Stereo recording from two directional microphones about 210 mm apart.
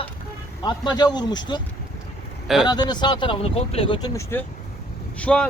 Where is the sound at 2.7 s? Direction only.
20° left (ahead or behind).